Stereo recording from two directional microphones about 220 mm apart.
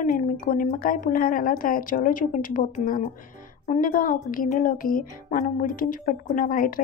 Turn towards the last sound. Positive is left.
turn(degrees=40)  # may be behind; listen again after turning